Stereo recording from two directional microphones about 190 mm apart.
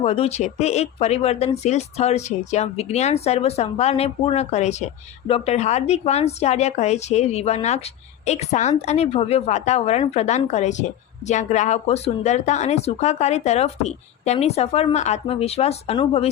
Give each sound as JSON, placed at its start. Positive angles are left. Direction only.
{"t": 0.0, "sound": "speech", "side_deg": 30}